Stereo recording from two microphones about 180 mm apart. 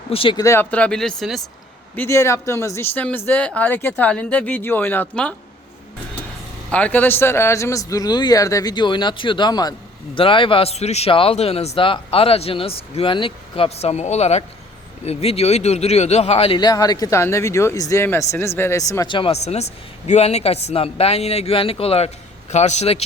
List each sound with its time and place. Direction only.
0.1 s speech: 30° left (ahead or behind); by 1.4 s centre (ahead or behind)
2.0 s speech: 15° left (ahead or behind)
6.7 s a man's voice: 5° left (ahead or behind); by 23.0 s 35° left (ahead or behind)